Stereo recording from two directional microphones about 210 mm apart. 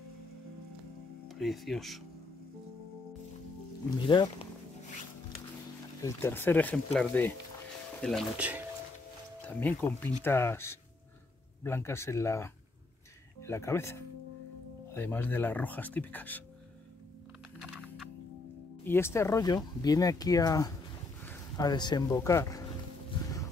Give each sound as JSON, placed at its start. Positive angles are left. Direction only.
{"t": 1.3, "sound": "speech", "side_deg": 0}
{"t": 4.1, "sound": "speech", "side_deg": 20}
{"t": 6.0, "sound": "speech", "side_deg": 10}
{"t": 9.5, "sound": "speech", "side_deg": 10}
{"t": 17.6, "sound": "music", "side_deg": 0}
{"t": 18.9, "sound": "speech", "side_deg": 10}